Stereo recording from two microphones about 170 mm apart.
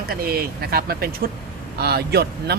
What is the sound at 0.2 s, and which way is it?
Speech, 65° right (ahead or behind).